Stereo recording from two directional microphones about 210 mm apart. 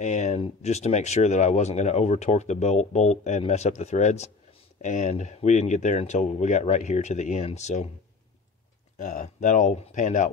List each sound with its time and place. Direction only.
0.0 s speech: 35° left (ahead or behind)
8.9 s speech: 35° left (ahead or behind)